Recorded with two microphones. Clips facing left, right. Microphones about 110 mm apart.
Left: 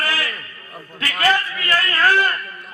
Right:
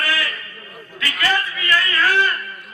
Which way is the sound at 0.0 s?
35° left (ahead or behind).